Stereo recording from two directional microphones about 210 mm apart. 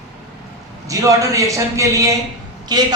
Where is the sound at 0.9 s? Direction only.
15° right (ahead or behind).